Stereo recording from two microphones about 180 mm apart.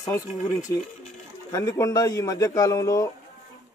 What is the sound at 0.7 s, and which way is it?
A man's voice, 15° left (ahead or behind).